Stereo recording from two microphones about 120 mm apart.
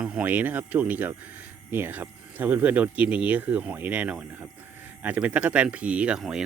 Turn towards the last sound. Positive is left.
turn(degrees=-5)  # may be behind; listen again after turning